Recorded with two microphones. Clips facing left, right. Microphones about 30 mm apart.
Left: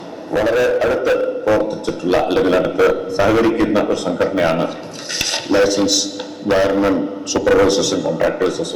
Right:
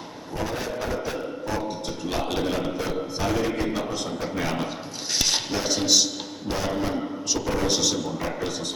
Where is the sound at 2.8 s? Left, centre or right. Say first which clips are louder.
Left 16 dB; left.